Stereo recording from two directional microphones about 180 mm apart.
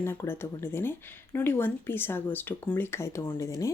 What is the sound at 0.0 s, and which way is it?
Speech, 15° left (ahead or behind).